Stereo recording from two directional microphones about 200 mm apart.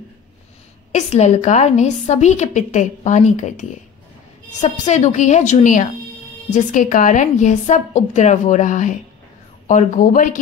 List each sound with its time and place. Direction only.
0.9 s a woman's voice: 35° left (ahead or behind)